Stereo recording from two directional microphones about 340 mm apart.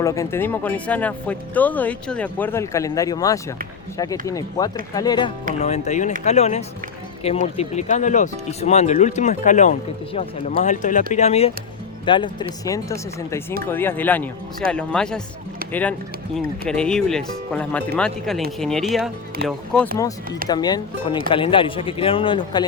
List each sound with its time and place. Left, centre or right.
0.0 s speech: centre